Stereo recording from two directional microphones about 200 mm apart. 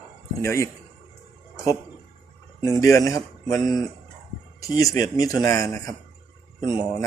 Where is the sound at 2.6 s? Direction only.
15° left (ahead or behind).